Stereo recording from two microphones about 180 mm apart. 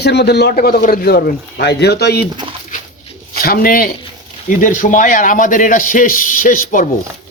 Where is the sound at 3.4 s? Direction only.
55° left (ahead or behind).